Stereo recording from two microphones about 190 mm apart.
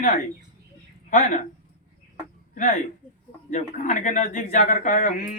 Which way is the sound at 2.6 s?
35° left (ahead or behind).